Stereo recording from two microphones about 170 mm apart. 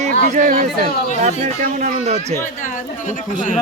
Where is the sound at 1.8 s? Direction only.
40° right (ahead or behind).